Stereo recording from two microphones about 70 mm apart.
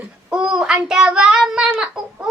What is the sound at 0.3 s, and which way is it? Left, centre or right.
Child singing, centre.